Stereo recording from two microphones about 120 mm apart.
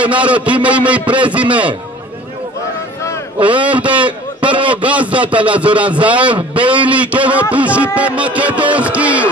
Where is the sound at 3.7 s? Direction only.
10° right (ahead or behind).